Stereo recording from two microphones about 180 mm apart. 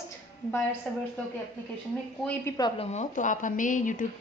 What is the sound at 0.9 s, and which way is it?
Speech, 5° left (ahead or behind).